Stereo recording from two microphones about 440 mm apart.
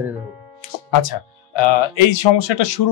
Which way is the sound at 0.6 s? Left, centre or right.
Left.